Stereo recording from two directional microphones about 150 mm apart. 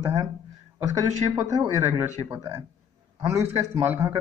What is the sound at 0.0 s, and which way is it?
A man's voice, 25° right (ahead or behind).